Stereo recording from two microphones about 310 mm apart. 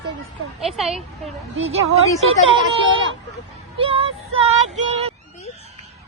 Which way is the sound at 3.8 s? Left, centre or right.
Centre.